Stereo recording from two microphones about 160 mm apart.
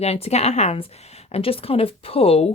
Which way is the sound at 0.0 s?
40° left (ahead or behind).